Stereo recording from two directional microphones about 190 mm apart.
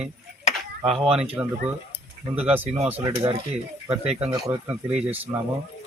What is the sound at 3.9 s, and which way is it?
Speech, 35° right (ahead or behind).